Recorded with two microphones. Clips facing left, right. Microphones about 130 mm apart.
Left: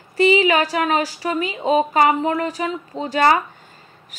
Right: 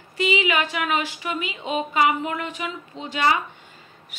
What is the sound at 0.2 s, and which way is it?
A woman's voice, 40° left (ahead or behind).